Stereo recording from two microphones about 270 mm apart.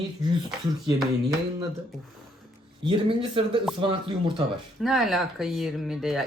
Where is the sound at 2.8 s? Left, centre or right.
Centre.